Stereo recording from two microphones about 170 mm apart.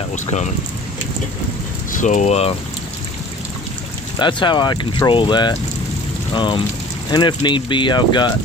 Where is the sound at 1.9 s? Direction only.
45° left (ahead or behind).